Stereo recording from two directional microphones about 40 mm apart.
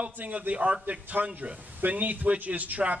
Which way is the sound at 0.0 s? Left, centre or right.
Right.